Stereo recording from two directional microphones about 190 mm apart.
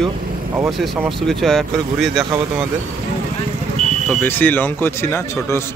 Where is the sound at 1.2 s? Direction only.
Centre (ahead or behind).